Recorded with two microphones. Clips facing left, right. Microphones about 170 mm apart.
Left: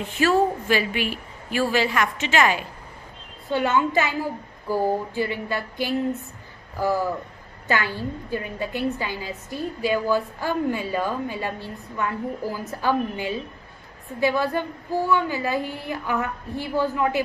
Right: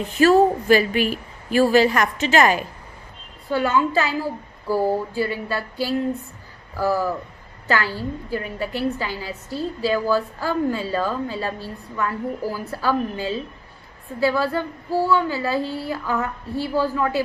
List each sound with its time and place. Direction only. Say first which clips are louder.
0.0 s a woman's voice: right 5 dB; 40° right (ahead or behind)
3.5 s a woman's voice: right 1 dB; 20° left (ahead or behind)